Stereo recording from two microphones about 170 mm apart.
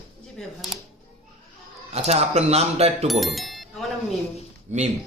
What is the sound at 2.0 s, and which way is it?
Speech, 40° right (ahead or behind).